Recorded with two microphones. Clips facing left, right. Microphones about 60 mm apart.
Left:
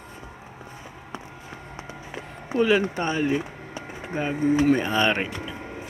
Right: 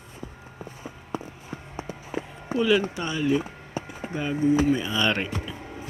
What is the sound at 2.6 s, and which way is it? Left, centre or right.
Speech, left.